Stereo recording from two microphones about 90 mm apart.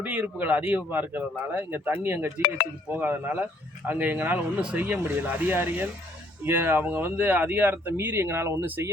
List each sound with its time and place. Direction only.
0.0 s speech: 20° right (ahead or behind)